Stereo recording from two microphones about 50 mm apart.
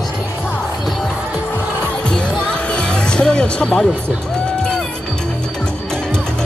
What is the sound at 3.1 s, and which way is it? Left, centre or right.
Speech, centre.